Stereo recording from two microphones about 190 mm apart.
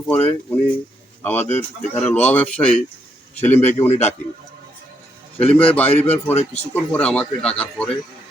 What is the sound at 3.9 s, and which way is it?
Speech, 35° left (ahead or behind).